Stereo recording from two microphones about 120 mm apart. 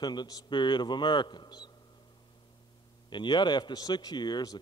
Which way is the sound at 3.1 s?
40° left (ahead or behind).